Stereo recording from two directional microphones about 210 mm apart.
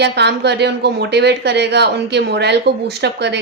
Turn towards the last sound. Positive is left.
turn(degrees=-55)  # may be behind; listen again after turning